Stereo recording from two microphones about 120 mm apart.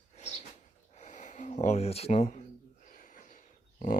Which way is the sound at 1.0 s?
85° left.